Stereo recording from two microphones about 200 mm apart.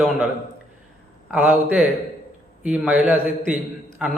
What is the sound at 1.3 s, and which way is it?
Speech, 5° right (ahead or behind).